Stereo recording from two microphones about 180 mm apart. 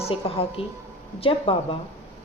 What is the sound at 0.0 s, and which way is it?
A woman's voice, 30° left (ahead or behind).